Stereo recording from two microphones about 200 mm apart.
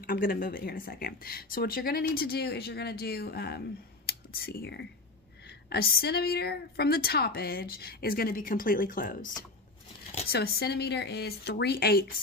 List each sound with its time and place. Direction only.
0.0 s speech: 45° left (ahead or behind)